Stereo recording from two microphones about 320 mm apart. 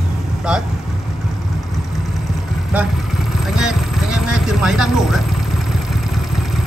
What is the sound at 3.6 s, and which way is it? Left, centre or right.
Vehicle, centre.